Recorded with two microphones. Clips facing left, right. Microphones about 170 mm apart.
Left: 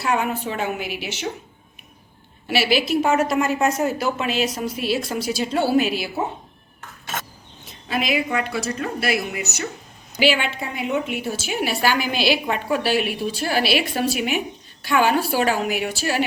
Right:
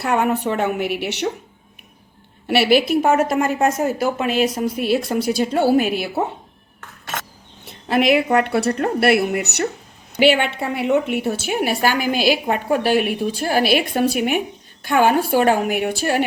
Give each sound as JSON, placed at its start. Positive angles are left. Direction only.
{"t": 0.0, "sound": "speech", "side_deg": -60}
{"t": 2.5, "sound": "a woman's voice", "side_deg": -60}
{"t": 7.6, "sound": "a woman's voice", "side_deg": -65}